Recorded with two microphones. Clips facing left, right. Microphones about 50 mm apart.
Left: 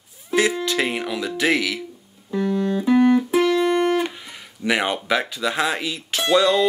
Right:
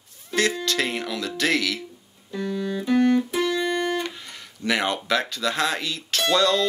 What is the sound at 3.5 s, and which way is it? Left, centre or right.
Music, left.